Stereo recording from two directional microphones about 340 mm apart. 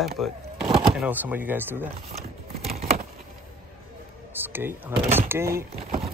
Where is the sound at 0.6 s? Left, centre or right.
Centre.